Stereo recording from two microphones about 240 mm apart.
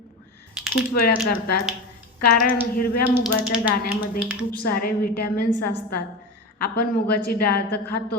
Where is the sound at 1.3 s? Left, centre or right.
Left.